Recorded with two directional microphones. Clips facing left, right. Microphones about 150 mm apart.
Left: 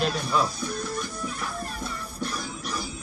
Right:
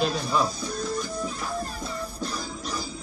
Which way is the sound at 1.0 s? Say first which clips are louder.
Right 2 dB; 30° right (ahead or behind).